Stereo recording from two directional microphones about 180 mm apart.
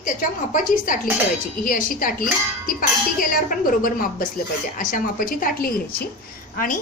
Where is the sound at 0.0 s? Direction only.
50° left (ahead or behind).